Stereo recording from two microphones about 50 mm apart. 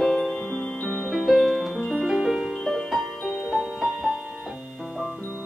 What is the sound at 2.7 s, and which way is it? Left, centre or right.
Music, centre.